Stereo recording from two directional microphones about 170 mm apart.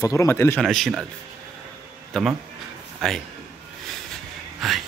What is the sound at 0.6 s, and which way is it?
Speech, centre (ahead or behind).